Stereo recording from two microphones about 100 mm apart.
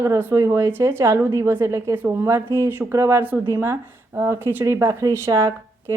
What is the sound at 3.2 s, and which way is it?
Speech, 15° right (ahead or behind).